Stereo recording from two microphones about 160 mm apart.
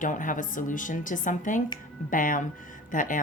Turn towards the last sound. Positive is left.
turn(degrees=55)  # may be behind; listen again after turning